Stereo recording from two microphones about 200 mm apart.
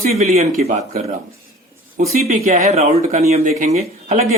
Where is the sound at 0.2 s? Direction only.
35° right (ahead or behind).